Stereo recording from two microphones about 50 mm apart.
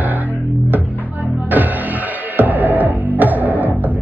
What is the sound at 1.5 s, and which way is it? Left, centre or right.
Music, right.